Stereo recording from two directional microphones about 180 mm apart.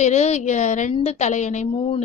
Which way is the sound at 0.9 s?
35° left (ahead or behind).